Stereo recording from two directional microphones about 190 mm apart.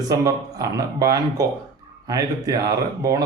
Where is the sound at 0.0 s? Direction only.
20° right (ahead or behind).